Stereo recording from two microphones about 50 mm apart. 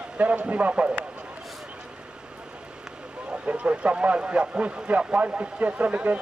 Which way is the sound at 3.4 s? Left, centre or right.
Right.